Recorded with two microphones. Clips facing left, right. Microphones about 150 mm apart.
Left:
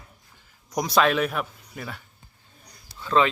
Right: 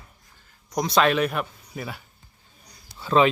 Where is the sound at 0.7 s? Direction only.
5° left (ahead or behind).